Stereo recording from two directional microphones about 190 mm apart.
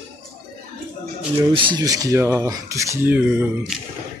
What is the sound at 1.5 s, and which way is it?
Speech, 25° right (ahead or behind).